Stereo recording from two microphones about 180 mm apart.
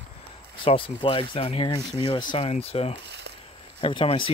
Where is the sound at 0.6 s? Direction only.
30° left (ahead or behind).